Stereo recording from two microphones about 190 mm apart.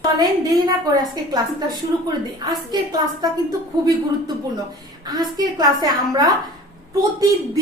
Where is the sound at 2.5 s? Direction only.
20° right (ahead or behind).